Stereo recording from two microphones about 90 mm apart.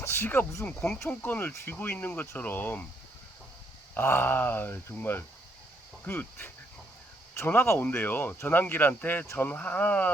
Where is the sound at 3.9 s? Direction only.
25° left (ahead or behind).